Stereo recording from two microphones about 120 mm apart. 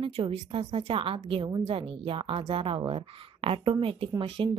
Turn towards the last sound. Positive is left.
turn(degrees=-45)  # may be behind; listen again after turning